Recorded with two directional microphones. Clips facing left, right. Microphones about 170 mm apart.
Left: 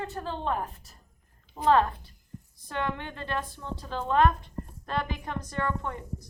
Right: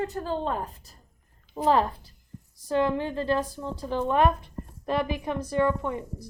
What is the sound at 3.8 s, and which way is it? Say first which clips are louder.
A woman's voice: right 1 dB; 15° right (ahead or behind).